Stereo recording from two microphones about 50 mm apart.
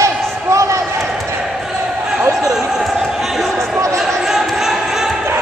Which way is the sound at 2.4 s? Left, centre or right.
Centre.